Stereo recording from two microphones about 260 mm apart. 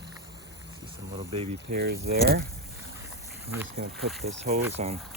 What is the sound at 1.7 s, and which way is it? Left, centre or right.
Speech, right.